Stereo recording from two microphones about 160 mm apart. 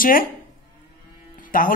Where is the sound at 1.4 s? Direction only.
55° left (ahead or behind).